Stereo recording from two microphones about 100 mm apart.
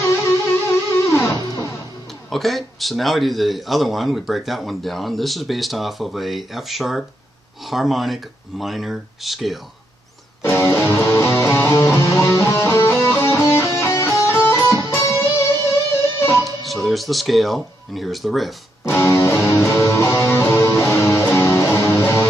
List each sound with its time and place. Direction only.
0.0 s music: 30° left (ahead or behind)
2.2 s speech: centre (ahead or behind)
10.4 s music: 25° left (ahead or behind)
15.0 s guitar: 30° left (ahead or behind)
16.8 s speech: centre (ahead or behind)
18.9 s music: 25° left (ahead or behind)